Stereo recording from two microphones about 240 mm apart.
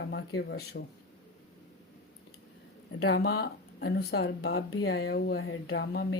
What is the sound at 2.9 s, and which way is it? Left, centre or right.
Speech, left.